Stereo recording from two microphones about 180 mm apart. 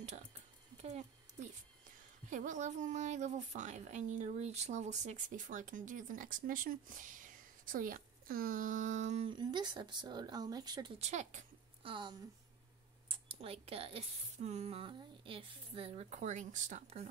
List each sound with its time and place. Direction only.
2.2 s a woman's voice: 45° right (ahead or behind)
9.3 s speech: 25° right (ahead or behind)
11.0 s a sound: 40° right (ahead or behind)
11.9 s speech: 25° right (ahead or behind)